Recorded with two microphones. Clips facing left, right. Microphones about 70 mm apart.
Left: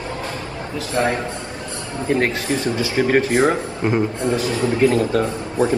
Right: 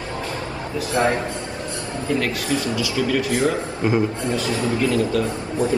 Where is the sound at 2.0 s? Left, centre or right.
Left.